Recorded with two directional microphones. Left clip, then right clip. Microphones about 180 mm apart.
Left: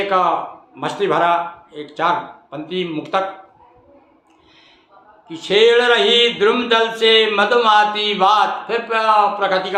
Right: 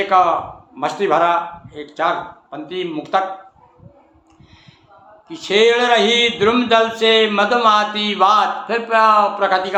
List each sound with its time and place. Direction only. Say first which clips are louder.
0.1 s speech: right 4 dB; 15° right (ahead or behind)
5.3 s speech: left 1 dB; 15° right (ahead or behind)